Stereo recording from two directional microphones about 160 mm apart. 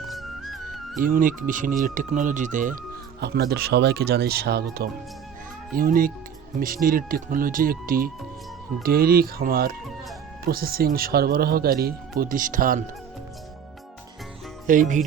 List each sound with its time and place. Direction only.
0.1 s music: centre (ahead or behind)
0.9 s speech: 55° right (ahead or behind)
3.2 s speech: 90° right
5.7 s speech: 60° right (ahead or behind)
14.7 s speech: 55° right (ahead or behind)